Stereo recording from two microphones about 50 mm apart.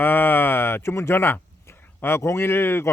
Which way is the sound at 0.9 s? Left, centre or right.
Left.